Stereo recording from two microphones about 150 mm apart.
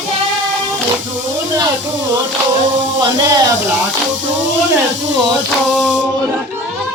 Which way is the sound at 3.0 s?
25° right (ahead or behind).